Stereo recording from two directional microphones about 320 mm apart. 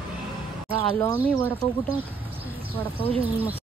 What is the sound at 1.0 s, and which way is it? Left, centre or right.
Speech, centre.